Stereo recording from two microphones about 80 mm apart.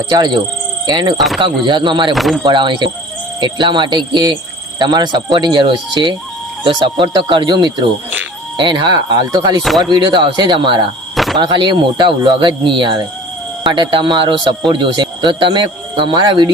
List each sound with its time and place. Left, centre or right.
0.1 s speech: right
1.4 s a man's voice: right
2.1 s speech: centre
2.4 s a man's voice: right
6.7 s speech: right
8.5 s speech: right
9.4 s speech: right
9.9 s speech: right
11.1 s a sound: centre
11.3 s a man's voice: right
14.7 s speech: right